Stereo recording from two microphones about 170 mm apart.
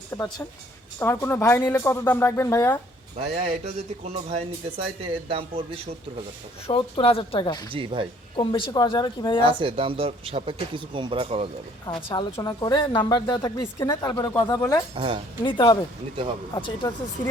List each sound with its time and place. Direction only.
0.1 s a woman's voice: 20° left (ahead or behind)
3.2 s speech: 40° right (ahead or behind)
6.7 s a woman's voice: 30° left (ahead or behind)
7.7 s speech: 30° right (ahead or behind)
8.4 s a woman's voice: 30° left (ahead or behind)
9.4 s speech: 30° right (ahead or behind)
11.9 s a woman's voice: 25° left (ahead or behind)
14.9 s speech: 30° right (ahead or behind)
15.4 s a woman's voice: 25° left (ahead or behind)
17.2 s speech: 15° left (ahead or behind)